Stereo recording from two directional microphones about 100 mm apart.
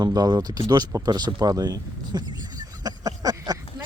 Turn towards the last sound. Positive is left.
turn(degrees=-40)  # may be behind; listen again after turning